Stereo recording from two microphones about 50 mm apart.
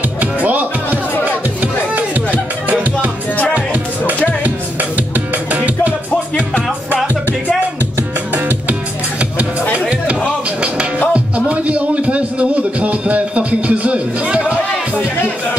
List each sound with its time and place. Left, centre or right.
0.2 s music: right
4.9 s music: right
9.4 s music: right
11.1 s music: right